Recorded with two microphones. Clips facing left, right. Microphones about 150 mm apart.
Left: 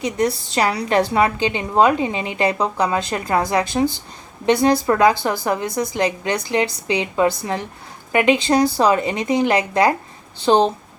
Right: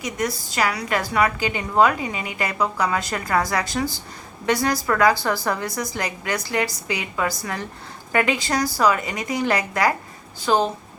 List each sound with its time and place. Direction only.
0.0 s a woman's voice: 30° left (ahead or behind)